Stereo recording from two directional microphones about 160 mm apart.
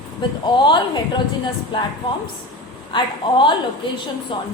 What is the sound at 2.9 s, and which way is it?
A woman's voice, 30° left (ahead or behind).